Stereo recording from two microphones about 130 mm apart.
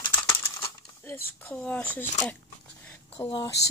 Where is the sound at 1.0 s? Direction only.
20° left (ahead or behind).